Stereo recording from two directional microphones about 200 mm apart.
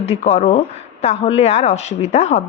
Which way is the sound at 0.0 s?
30° left (ahead or behind).